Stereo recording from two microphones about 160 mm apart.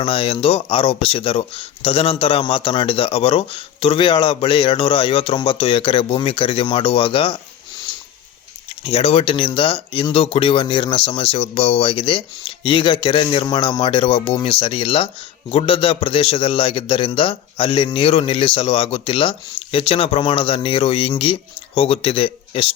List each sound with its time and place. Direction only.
0.0 s a man's voice: 35° left (ahead or behind)
8.8 s a man's voice: 35° left (ahead or behind)